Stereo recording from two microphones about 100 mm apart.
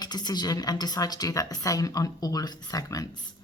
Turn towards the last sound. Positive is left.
turn(degrees=40)  # may be behind; listen again after turning